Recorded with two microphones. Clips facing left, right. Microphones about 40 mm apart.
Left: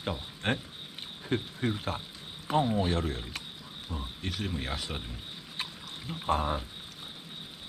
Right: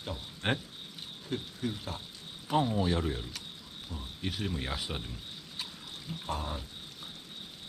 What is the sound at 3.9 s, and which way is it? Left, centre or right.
Pour, left.